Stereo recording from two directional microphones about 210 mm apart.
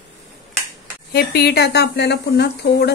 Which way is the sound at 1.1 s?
50° left (ahead or behind).